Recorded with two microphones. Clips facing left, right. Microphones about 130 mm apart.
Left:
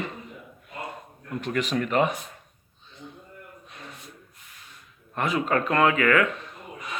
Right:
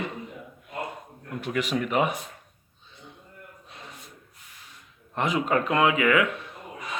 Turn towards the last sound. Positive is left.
turn(degrees=-10)  # may be behind; listen again after turning